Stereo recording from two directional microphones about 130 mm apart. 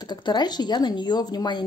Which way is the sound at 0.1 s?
35° left (ahead or behind).